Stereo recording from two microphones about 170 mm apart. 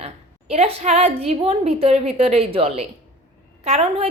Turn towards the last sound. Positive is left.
turn(degrees=-35)  # may be behind; listen again after turning